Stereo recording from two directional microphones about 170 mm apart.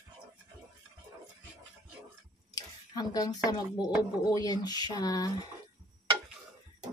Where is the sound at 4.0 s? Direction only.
25° left (ahead or behind).